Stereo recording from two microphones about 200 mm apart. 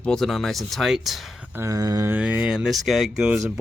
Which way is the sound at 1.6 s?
15° right (ahead or behind).